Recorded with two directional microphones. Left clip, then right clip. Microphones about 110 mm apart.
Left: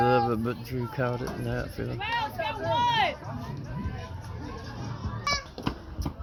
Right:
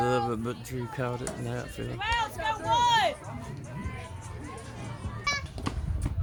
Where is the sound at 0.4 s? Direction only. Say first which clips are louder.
Left 3 dB; 20° right (ahead or behind).